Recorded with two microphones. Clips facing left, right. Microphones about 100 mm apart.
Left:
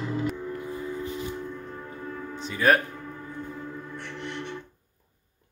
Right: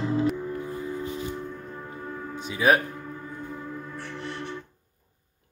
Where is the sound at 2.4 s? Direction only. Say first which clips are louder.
Even; 10° right (ahead or behind).